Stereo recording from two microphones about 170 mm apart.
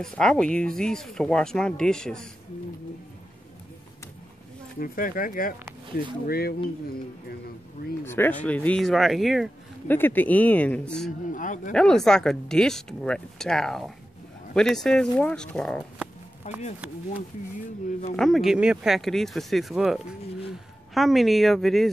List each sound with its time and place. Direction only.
0.0 s speech: 5° left (ahead or behind)
4.7 s speech: 55° left (ahead or behind)
8.0 s speech: 15° left (ahead or behind)
9.8 s speech: 10° left (ahead or behind)
11.3 s speech: 50° left (ahead or behind)
11.7 s speech: 5° left (ahead or behind)
16.5 s speech: 45° left (ahead or behind)
18.1 s speech: centre (ahead or behind)